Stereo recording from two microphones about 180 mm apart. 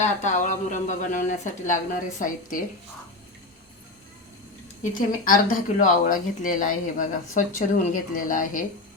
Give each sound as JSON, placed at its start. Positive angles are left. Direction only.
{"t": 0.0, "sound": "a woman's voice", "side_deg": 40}
{"t": 4.9, "sound": "a woman's voice", "side_deg": 50}